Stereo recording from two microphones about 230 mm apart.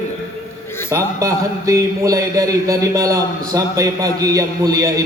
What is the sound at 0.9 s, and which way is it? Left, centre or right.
A man's voice, centre.